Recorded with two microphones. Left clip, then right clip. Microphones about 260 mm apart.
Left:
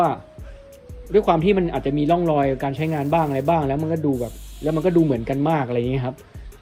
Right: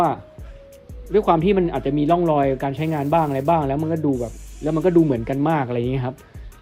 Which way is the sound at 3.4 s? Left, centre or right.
Right.